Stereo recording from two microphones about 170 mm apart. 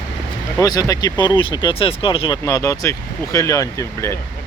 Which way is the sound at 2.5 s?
20° left (ahead or behind).